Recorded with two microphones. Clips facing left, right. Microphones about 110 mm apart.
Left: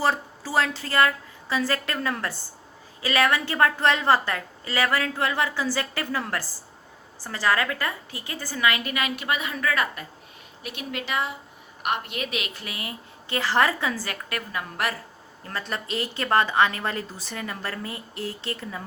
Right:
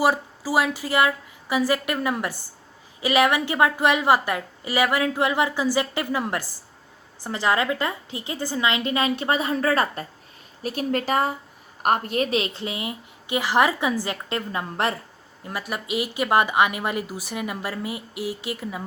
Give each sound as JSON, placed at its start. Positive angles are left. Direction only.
{"t": 0.0, "sound": "a woman's voice", "side_deg": -10}
{"t": 15.4, "sound": "a woman's voice", "side_deg": -10}